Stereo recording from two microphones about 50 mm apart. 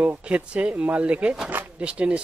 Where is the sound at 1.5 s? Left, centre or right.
Right.